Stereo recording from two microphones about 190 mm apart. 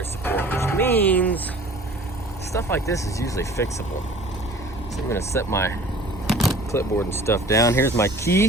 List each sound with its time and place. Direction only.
0.3 s music: 10° left (ahead or behind)
2.5 s speech: 15° left (ahead or behind)
5.1 s speech: 15° left (ahead or behind)
6.2 s vehicle: centre (ahead or behind)
6.7 s speech: 15° left (ahead or behind)